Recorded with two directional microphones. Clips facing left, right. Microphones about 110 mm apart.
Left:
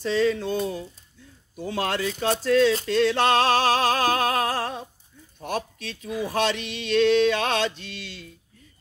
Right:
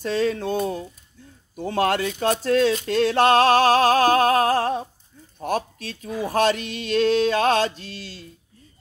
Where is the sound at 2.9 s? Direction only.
45° right (ahead or behind).